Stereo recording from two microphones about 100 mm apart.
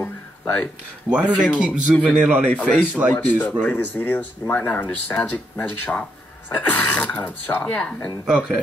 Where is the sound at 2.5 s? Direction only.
10° left (ahead or behind).